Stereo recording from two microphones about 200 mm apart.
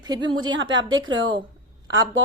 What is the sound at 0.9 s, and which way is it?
Speech, 80° right.